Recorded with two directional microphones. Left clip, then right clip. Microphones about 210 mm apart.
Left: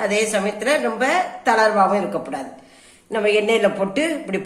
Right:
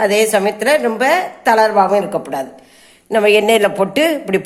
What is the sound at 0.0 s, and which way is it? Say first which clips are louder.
Speech: right 7 dB; 45° right (ahead or behind).